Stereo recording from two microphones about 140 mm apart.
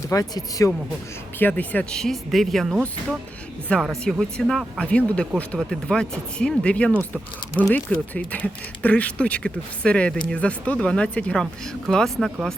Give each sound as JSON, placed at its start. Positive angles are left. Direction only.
{"t": 0.1, "sound": "speech", "side_deg": 25}
{"t": 1.4, "sound": "speech", "side_deg": 10}